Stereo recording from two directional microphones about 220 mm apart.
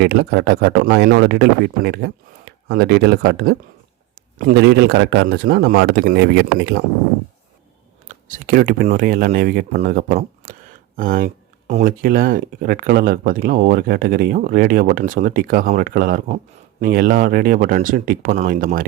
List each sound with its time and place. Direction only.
0.0 s speech: 45° right (ahead or behind)
8.0 s speech: 35° right (ahead or behind)